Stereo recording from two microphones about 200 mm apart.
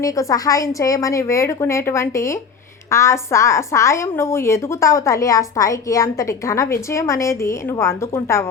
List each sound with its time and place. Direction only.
0.0 s a woman's voice: 15° left (ahead or behind)